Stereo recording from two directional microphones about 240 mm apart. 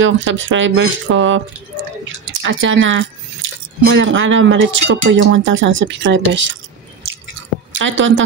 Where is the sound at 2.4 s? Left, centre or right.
Right.